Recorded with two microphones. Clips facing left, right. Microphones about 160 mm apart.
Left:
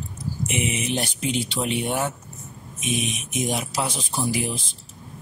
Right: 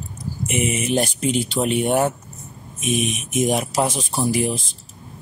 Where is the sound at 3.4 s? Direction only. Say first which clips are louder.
Right 6 dB; 50° right (ahead or behind).